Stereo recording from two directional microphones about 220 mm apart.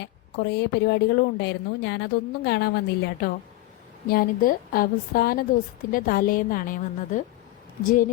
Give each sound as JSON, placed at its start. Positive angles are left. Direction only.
{"t": 0.0, "sound": "a woman's voice", "side_deg": 50}